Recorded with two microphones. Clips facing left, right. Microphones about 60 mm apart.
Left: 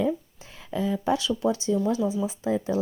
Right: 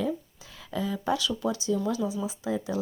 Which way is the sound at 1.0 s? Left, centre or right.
Left.